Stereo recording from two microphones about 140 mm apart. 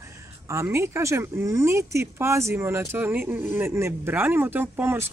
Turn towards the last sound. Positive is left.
turn(degrees=-15)  # may be behind; listen again after turning